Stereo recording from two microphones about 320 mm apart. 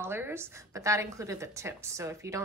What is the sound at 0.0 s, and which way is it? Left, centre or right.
A woman's voice, centre.